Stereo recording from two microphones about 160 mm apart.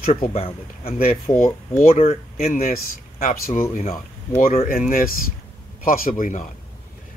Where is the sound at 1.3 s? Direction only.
25° left (ahead or behind).